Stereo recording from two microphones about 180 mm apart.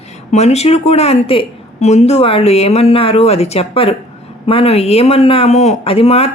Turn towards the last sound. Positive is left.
turn(degrees=35)  # may be behind; listen again after turning